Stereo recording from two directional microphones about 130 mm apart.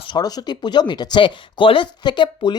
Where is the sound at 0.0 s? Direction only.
35° left (ahead or behind).